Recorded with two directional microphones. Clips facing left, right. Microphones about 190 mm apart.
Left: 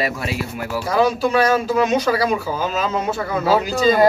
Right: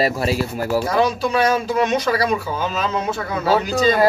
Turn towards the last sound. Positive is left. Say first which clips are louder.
# left 1 dB
turn(degrees=0)  # may be behind; listen again after turning